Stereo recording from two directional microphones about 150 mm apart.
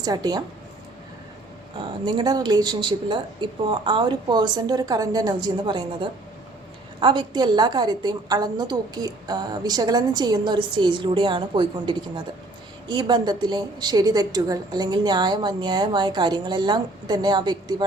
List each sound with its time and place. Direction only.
0.0 s a woman's voice: 25° right (ahead or behind)
2.0 s a woman's voice: 30° right (ahead or behind)